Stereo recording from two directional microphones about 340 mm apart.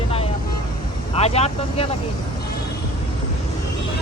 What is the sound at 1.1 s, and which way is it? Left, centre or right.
Speech, centre.